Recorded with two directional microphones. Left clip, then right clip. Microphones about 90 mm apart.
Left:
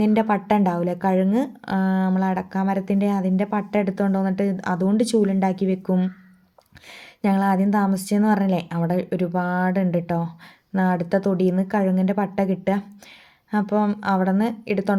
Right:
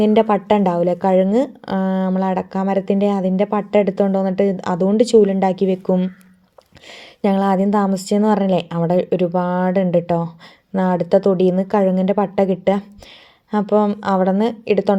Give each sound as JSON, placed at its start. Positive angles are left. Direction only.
{"t": 0.0, "sound": "a woman's voice", "side_deg": -40}
{"t": 7.2, "sound": "a woman's voice", "side_deg": -40}